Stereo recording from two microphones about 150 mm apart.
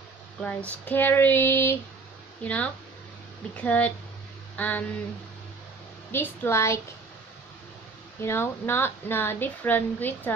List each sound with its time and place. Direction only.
0.4 s a woman's voice: 10° left (ahead or behind)
6.1 s a woman's voice: 15° left (ahead or behind)
8.2 s a woman's voice: 15° left (ahead or behind)